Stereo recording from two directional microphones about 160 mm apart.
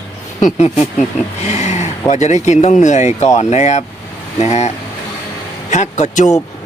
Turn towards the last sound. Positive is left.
turn(degrees=45)  # may be behind; listen again after turning